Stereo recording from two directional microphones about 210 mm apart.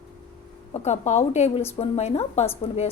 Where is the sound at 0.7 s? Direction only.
30° left (ahead or behind).